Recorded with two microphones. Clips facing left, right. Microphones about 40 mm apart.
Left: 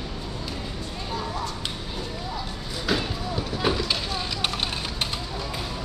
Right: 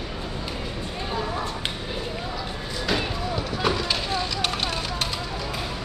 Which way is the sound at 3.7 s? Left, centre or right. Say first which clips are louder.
Right 2 dB; centre.